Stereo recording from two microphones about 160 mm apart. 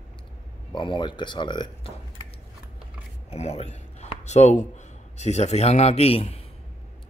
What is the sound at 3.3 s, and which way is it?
Speech, 40° left (ahead or behind).